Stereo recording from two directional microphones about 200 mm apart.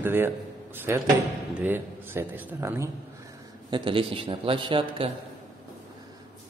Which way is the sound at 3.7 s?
25° right (ahead or behind).